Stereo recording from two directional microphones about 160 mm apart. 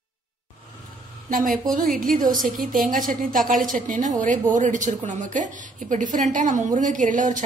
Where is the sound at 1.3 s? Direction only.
60° right (ahead or behind).